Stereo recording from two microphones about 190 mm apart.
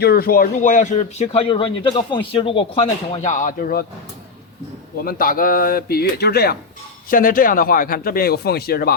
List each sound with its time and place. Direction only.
0.0 s speech: 55° left (ahead or behind)
5.0 s speech: 50° left (ahead or behind)